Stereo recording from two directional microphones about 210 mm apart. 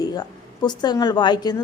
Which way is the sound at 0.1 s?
20° left (ahead or behind).